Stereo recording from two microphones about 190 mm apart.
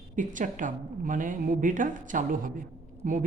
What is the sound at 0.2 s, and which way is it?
Speech, 40° right (ahead or behind).